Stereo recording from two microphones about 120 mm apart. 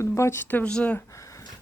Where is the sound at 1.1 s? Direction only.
25° left (ahead or behind).